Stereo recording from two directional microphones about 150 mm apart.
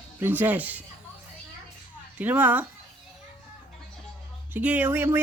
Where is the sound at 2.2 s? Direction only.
10° right (ahead or behind).